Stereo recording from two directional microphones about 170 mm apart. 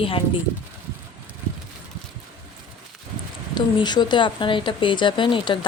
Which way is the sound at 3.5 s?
25° left (ahead or behind).